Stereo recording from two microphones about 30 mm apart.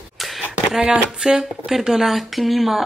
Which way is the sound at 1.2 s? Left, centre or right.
Centre.